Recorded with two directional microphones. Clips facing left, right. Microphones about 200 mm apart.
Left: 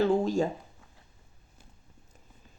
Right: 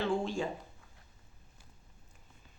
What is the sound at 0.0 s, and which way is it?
Speech, 40° left (ahead or behind).